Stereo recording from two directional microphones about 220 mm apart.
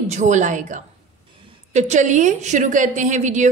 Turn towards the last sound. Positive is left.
turn(degrees=-35)  # may be behind; listen again after turning